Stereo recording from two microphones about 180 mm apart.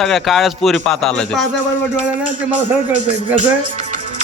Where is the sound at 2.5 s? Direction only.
45° right (ahead or behind).